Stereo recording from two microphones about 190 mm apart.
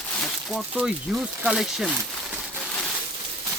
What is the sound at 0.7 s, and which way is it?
Speech, 5° right (ahead or behind).